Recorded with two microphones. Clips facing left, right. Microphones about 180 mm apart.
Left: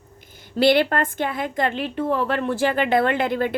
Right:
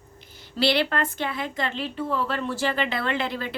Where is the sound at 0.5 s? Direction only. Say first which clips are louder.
Left 6 dB; 50° left (ahead or behind).